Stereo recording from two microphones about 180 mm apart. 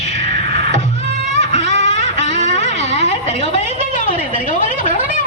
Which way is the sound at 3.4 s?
45° left (ahead or behind).